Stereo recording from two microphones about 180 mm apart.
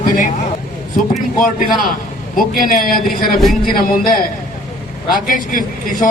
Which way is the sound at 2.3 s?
55° left (ahead or behind).